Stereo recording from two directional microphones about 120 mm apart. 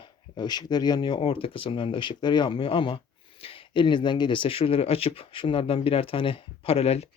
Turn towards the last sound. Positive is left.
turn(degrees=55)  # may be behind; listen again after turning